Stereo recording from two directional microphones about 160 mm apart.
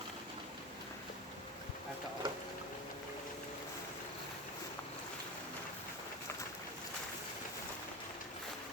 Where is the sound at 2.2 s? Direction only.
30° right (ahead or behind).